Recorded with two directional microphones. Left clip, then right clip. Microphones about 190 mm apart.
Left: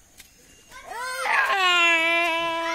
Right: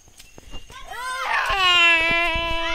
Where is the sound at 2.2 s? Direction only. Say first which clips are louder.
Right 1 dB; 10° right (ahead or behind).